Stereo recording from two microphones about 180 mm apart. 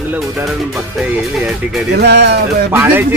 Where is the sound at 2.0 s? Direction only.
70° right (ahead or behind).